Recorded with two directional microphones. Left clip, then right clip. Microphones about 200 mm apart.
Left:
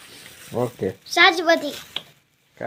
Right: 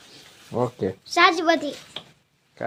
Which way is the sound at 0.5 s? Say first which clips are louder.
Even; centre (ahead or behind).